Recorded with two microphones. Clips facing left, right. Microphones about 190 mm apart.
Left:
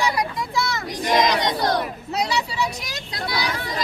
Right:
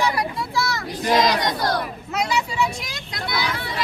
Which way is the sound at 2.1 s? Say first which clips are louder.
Right 1 dB; 35° left (ahead or behind).